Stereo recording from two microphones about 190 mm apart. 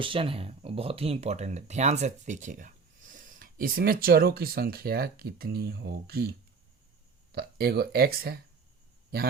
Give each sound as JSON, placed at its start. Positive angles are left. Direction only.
{"t": 0.0, "sound": "speech", "side_deg": -30}
{"t": 7.3, "sound": "speech", "side_deg": -55}